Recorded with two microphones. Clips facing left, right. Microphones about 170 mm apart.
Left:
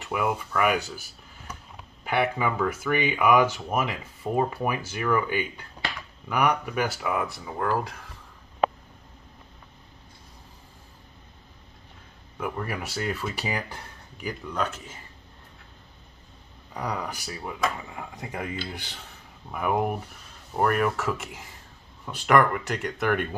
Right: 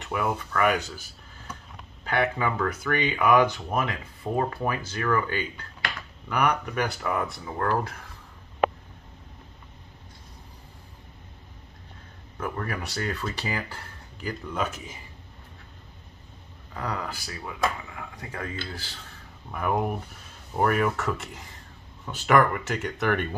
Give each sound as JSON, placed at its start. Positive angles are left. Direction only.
{"t": 0.0, "sound": "speech", "side_deg": 5}
{"t": 2.0, "sound": "speech", "side_deg": 10}
{"t": 12.4, "sound": "speech", "side_deg": 10}
{"t": 14.4, "sound": "speech", "side_deg": -5}
{"t": 16.7, "sound": "speech", "side_deg": 15}
{"t": 19.5, "sound": "speech", "side_deg": 5}